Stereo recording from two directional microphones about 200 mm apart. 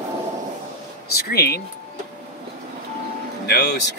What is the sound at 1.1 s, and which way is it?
Speech, 50° left (ahead or behind).